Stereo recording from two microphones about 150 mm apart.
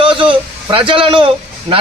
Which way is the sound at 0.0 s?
35° right (ahead or behind).